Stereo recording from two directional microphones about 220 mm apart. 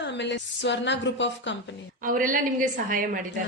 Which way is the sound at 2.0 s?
40° right (ahead or behind).